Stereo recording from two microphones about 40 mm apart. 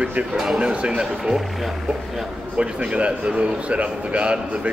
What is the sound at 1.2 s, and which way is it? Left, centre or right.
Speech, centre.